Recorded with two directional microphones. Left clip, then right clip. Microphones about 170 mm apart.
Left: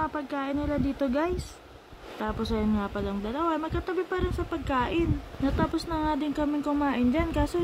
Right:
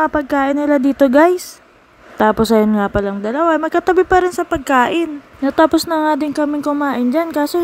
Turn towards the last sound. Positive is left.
turn(degrees=-40)  # may be behind; listen again after turning